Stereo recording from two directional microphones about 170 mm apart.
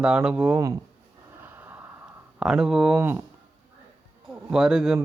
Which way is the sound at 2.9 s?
15° right (ahead or behind).